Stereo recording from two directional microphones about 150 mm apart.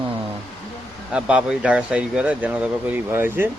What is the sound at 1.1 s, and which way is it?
Speech, 5° right (ahead or behind).